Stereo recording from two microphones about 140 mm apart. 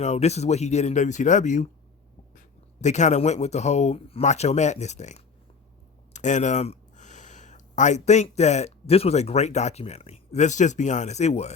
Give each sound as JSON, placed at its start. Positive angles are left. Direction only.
{"t": 0.0, "sound": "speech", "side_deg": 50}
{"t": 2.8, "sound": "speech", "side_deg": 55}